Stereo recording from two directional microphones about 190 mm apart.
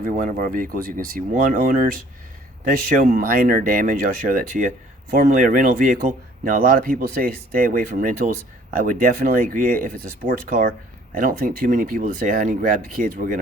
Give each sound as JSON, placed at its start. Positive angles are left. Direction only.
{"t": 0.0, "sound": "speech", "side_deg": -45}
{"t": 3.0, "sound": "speech", "side_deg": -50}